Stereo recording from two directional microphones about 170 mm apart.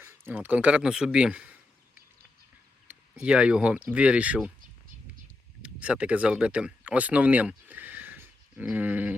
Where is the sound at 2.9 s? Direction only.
5° right (ahead or behind).